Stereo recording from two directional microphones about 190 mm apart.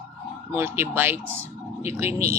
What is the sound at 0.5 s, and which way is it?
Speech, 10° right (ahead or behind).